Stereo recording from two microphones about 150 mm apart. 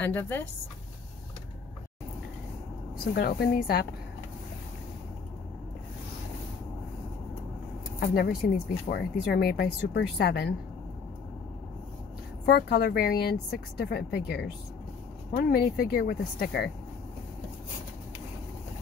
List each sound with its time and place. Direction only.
0.0 s speech: 15° left (ahead or behind)
3.2 s speech: 90° left
8.0 s speech: 90° left
12.4 s speech: 90° left